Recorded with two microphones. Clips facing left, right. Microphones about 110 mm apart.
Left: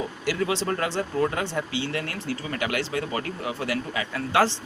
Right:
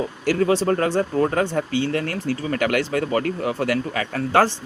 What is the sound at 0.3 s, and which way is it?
Speech, 45° right (ahead or behind).